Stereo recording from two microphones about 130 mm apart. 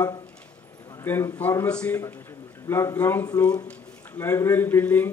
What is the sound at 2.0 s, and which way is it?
A man's voice, 20° left (ahead or behind).